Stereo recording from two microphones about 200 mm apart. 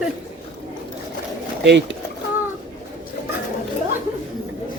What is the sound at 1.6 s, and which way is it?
Speech, 60° right (ahead or behind).